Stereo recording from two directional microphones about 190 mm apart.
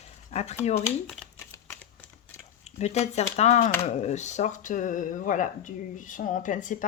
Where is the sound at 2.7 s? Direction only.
35° left (ahead or behind).